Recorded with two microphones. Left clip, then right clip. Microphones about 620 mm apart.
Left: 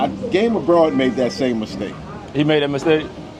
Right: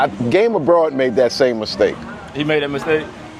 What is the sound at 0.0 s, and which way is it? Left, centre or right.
Speech, right.